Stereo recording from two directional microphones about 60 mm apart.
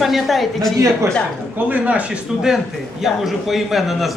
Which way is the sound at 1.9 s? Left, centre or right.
Centre.